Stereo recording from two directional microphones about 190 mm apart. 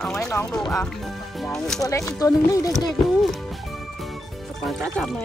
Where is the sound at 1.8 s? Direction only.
15° left (ahead or behind).